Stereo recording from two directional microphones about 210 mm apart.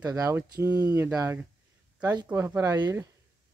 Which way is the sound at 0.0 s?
15° right (ahead or behind).